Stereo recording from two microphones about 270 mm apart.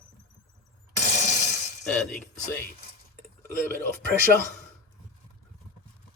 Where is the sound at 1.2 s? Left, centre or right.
Left.